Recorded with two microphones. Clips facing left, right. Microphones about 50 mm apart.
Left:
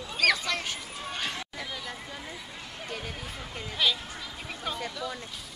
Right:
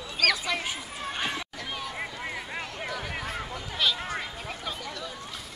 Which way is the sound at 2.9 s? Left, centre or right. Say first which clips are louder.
Right 1 dB; right.